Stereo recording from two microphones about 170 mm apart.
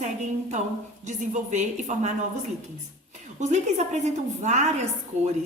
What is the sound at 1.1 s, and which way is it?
A woman's voice, 45° right (ahead or behind).